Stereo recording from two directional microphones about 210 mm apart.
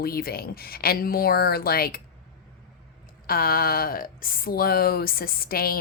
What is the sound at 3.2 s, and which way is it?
A woman's voice, 45° left (ahead or behind).